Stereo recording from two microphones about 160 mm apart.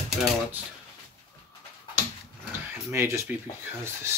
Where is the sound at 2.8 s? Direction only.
15° right (ahead or behind).